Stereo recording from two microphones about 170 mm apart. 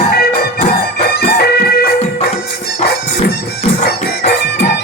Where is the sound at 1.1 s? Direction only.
70° left (ahead or behind).